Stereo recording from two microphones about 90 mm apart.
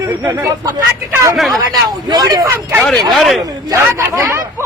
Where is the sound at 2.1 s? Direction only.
50° right (ahead or behind).